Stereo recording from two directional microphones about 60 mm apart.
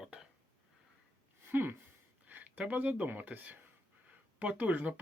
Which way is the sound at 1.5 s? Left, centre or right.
Right.